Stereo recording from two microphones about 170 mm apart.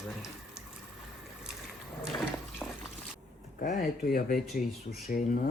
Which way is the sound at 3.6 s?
55° left (ahead or behind).